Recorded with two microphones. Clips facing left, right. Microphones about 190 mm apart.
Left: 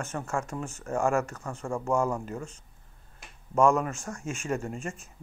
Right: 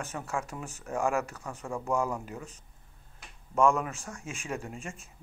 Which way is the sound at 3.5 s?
Centre (ahead or behind).